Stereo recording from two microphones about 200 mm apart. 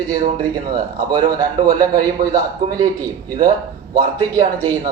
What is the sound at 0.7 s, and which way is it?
Speech, 20° right (ahead or behind).